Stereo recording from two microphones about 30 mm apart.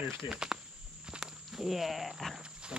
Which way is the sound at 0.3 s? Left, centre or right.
Right.